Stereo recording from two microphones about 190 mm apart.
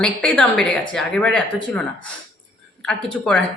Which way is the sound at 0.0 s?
5° left (ahead or behind).